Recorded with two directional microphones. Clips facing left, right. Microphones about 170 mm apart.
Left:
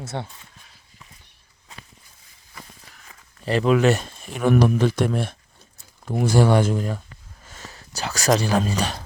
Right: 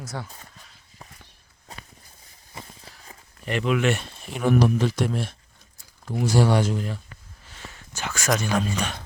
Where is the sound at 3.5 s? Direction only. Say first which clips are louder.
Left 5 dB; 35° left (ahead or behind).